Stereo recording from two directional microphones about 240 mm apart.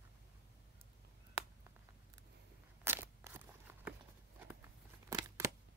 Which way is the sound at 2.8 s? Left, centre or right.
Centre.